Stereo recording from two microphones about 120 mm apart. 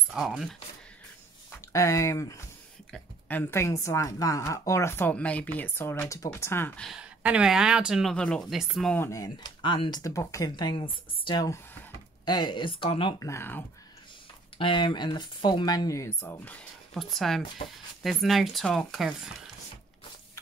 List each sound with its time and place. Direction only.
0.1 s speech: 5° right (ahead or behind)
1.7 s a woman's voice: 25° left (ahead or behind)
2.9 s a woman's voice: 15° left (ahead or behind)
6.8 s speech: 5° right (ahead or behind)
8.9 s a woman's voice: 25° left (ahead or behind)
9.6 s speech: 40° left (ahead or behind)
13.2 s a woman's voice: 20° left (ahead or behind)
14.6 s speech: 45° left (ahead or behind); by 16.5 s 20° left (ahead or behind)
16.9 s speech: centre (ahead or behind)